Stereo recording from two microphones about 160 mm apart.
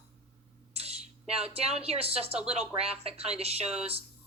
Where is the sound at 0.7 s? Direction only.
40° right (ahead or behind).